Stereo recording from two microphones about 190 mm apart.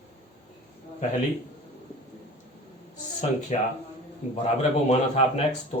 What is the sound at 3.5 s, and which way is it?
Speech, 40° left (ahead or behind).